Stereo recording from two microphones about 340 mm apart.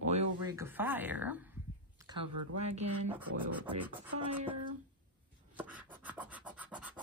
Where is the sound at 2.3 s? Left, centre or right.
Right.